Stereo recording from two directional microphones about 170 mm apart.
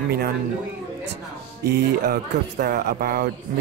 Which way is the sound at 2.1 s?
65° right (ahead or behind).